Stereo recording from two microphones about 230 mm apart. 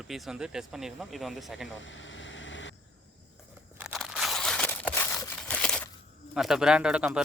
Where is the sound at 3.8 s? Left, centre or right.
Centre.